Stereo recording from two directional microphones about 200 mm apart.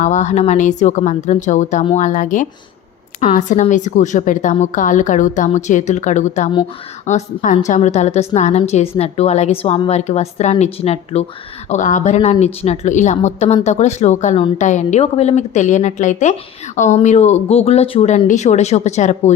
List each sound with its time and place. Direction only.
0.0 s a woman's voice: 35° left (ahead or behind)